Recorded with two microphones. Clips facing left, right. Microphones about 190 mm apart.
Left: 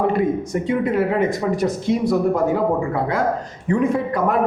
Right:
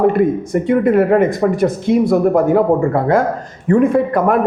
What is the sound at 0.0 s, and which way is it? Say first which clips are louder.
A man's voice: right 6 dB; 55° right (ahead or behind).